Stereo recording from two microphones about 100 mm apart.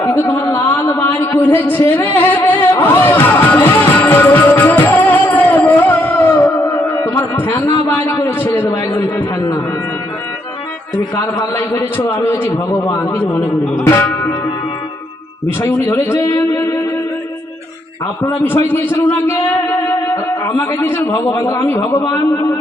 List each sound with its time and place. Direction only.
0.0 s a sound: 20° left (ahead or behind)
6.3 s music: 35° left (ahead or behind)
7.0 s a sound: 20° left (ahead or behind)
7.9 s a man's voice: 20° left (ahead or behind)
11.5 s a man's voice: 35° left (ahead or behind)
13.8 s music: 25° left (ahead or behind)
15.9 s a man's voice: 25° left (ahead or behind)
18.4 s a man's voice: 20° left (ahead or behind)
21.9 s a man's voice: 50° left (ahead or behind)